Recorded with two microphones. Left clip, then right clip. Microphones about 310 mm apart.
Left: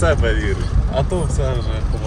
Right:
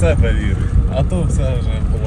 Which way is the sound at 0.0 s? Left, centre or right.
Left.